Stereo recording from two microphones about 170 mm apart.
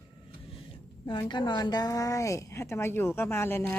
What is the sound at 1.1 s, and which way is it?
A woman's voice, 25° left (ahead or behind).